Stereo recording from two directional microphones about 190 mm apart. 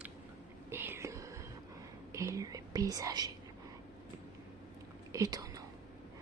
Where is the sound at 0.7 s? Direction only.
10° right (ahead or behind).